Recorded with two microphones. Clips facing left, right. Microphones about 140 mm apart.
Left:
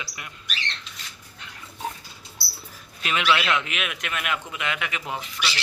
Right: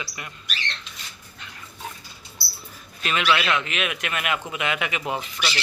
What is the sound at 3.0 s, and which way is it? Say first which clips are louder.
Speech: right 1 dB; 10° left (ahead or behind).